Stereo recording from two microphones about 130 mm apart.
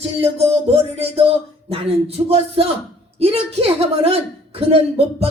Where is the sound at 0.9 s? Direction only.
50° right (ahead or behind).